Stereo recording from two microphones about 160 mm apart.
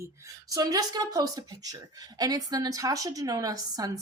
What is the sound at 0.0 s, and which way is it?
A woman's voice, 20° right (ahead or behind).